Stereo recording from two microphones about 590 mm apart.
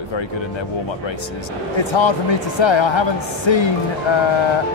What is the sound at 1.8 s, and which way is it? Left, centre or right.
Speech, left.